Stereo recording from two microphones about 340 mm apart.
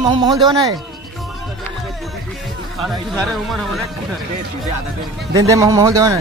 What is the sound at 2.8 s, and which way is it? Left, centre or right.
Speech, centre.